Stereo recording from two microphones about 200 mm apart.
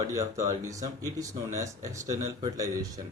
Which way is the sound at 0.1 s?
15° right (ahead or behind).